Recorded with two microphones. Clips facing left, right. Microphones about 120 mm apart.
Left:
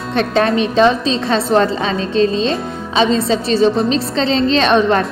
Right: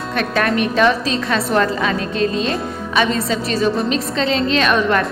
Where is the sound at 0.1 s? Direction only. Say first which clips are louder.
Left 4 dB; 25° left (ahead or behind).